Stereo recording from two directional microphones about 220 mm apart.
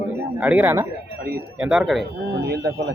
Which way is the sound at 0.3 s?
5° right (ahead or behind).